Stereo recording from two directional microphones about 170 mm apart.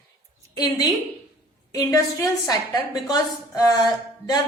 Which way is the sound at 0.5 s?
20° left (ahead or behind).